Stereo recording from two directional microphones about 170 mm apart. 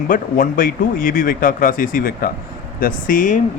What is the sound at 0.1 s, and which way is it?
Speech, 55° left (ahead or behind).